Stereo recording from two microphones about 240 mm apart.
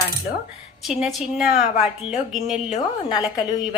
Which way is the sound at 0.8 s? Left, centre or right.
Centre.